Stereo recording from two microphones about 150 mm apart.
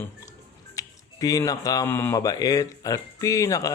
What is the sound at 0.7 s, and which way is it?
Music, 25° left (ahead or behind).